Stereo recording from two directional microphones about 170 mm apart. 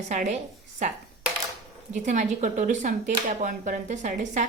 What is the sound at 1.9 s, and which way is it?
Speech, 45° right (ahead or behind).